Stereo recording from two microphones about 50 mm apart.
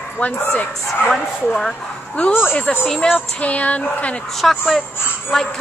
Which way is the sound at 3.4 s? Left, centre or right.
Left.